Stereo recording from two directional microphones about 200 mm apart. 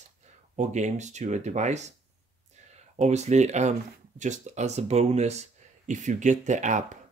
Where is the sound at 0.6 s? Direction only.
35° right (ahead or behind).